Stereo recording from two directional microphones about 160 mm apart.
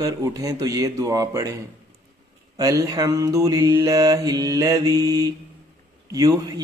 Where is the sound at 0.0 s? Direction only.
20° right (ahead or behind).